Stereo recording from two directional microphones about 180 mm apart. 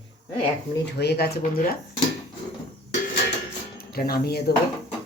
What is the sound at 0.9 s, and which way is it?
Speech, 65° left (ahead or behind).